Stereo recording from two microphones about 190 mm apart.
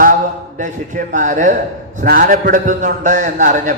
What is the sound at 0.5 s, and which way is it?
A man's voice, 40° right (ahead or behind).